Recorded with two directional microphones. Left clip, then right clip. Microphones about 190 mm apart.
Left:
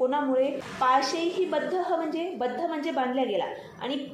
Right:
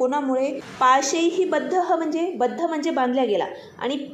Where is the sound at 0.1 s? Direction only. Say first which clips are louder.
Right 2 dB; 35° right (ahead or behind).